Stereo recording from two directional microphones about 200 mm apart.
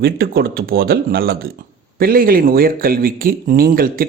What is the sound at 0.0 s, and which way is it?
A man's voice, 50° right (ahead or behind).